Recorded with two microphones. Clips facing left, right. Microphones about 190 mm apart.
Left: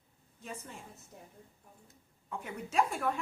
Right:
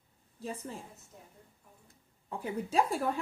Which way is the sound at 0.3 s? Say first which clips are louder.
Right 6 dB; 35° right (ahead or behind).